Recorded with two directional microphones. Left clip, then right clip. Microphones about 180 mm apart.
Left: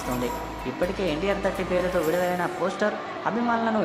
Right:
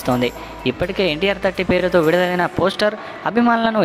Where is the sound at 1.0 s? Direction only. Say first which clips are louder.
Right 9 dB; 45° right (ahead or behind).